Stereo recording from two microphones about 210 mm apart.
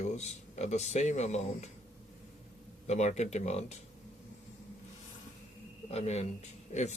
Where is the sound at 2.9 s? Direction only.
35° left (ahead or behind).